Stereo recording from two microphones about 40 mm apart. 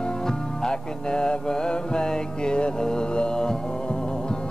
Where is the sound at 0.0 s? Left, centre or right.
Centre.